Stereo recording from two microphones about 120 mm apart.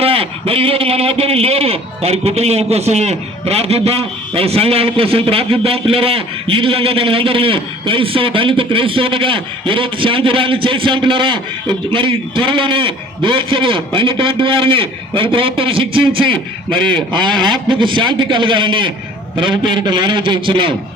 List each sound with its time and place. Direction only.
0.0 s a man's voice: 55° right (ahead or behind)
16.3 s a man's voice: 10° left (ahead or behind)
16.9 s a man's voice: 40° right (ahead or behind)